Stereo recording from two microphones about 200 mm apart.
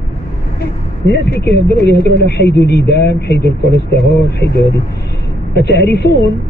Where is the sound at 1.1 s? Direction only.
55° left (ahead or behind).